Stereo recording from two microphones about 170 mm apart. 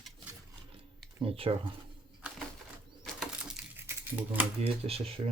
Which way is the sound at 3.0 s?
Centre (ahead or behind).